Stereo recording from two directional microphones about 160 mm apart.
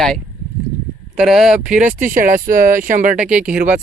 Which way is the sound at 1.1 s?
5° right (ahead or behind).